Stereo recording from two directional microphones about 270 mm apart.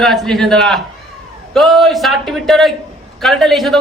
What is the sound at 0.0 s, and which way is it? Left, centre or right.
A man's voice, centre.